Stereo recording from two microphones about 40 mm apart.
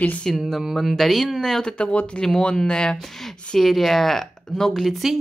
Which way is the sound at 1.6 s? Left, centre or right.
Left.